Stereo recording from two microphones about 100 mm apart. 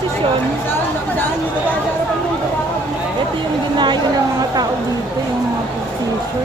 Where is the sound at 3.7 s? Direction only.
50° right (ahead or behind).